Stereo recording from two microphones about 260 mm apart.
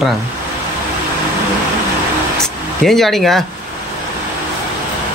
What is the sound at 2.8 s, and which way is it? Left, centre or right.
Speech, centre.